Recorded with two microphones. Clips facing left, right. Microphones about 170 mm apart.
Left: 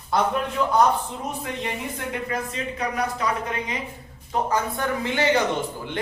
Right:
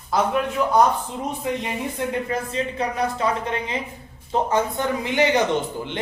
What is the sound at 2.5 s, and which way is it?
A woman's voice, 30° right (ahead or behind).